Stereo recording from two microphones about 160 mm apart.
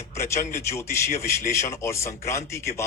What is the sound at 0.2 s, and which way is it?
A man's voice, 15° left (ahead or behind).